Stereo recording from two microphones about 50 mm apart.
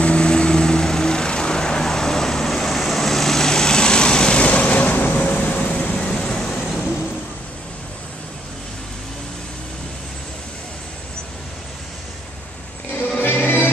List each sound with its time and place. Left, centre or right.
0.0 s vehicle: centre
5.9 s vehicle: centre
13.2 s music: left